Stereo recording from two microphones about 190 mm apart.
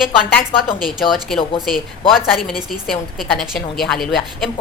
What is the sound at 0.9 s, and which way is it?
A woman's voice, centre (ahead or behind).